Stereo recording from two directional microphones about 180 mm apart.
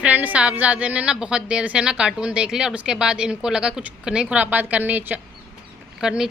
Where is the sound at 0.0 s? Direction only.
10° right (ahead or behind).